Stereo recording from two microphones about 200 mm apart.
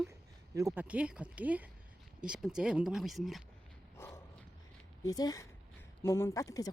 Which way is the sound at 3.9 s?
15° left (ahead or behind).